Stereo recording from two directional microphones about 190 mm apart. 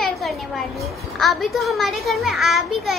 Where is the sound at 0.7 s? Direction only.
Centre (ahead or behind).